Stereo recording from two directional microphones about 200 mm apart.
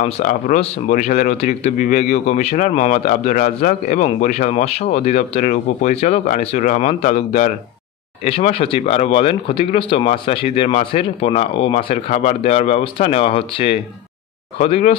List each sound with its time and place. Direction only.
0.0 s speech: 40° left (ahead or behind)
8.3 s speech: 30° left (ahead or behind)